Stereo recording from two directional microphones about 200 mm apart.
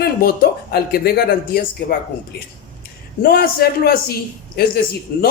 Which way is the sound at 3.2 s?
50° left (ahead or behind).